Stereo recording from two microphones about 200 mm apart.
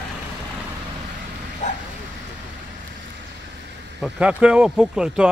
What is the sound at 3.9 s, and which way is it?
Speech, 5° right (ahead or behind).